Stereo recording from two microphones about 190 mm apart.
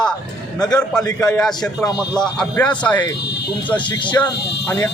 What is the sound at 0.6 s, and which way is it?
Speech, 20° left (ahead or behind).